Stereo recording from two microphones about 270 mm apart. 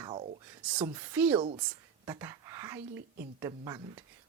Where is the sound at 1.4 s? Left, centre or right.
Centre.